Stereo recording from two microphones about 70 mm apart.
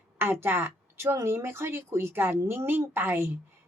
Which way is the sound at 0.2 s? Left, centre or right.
Right.